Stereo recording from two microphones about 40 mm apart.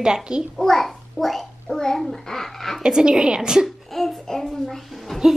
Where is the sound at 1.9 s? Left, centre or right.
Centre.